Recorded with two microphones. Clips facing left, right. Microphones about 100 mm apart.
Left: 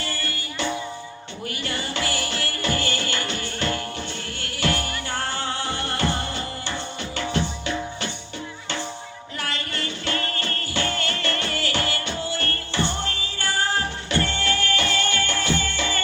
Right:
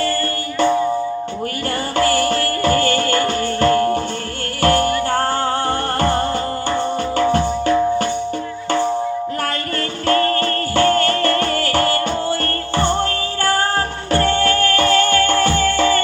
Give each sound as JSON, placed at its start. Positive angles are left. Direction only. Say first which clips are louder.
{"t": 2.0, "sound": "music", "louder": "right 14 dB", "side_deg": -45}
{"t": 10.1, "sound": "music", "louder": "right 14 dB", "side_deg": -45}